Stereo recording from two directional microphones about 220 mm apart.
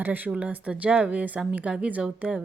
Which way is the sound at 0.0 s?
10° right (ahead or behind).